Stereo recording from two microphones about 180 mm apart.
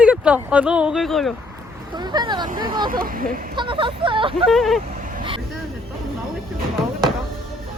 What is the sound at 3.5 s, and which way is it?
Speech, 25° right (ahead or behind).